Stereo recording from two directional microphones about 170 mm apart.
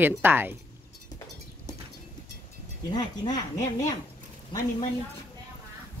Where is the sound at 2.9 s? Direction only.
25° left (ahead or behind).